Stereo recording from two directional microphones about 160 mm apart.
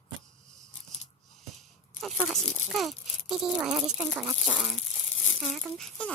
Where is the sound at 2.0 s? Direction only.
Centre (ahead or behind).